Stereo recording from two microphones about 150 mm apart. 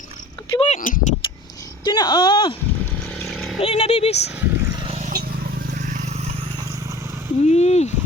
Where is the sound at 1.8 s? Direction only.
30° left (ahead or behind).